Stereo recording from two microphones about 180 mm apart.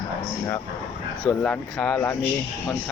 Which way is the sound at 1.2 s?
5° left (ahead or behind).